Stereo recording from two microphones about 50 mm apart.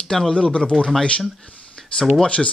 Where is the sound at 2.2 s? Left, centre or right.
Left.